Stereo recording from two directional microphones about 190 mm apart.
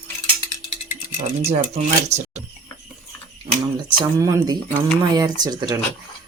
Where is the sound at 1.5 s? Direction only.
35° right (ahead or behind).